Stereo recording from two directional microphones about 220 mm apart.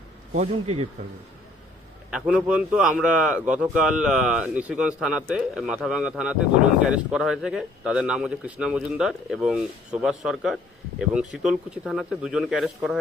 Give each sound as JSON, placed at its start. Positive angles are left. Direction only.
{"t": 0.3, "sound": "speech", "side_deg": -30}
{"t": 2.0, "sound": "speech", "side_deg": -5}